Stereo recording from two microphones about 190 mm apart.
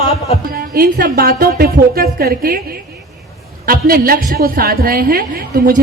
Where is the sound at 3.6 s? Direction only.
50° right (ahead or behind).